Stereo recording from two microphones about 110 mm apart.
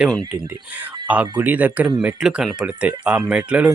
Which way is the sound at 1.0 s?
15° right (ahead or behind).